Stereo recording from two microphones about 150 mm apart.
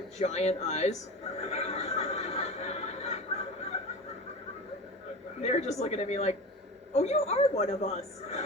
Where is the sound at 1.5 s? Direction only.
45° left (ahead or behind).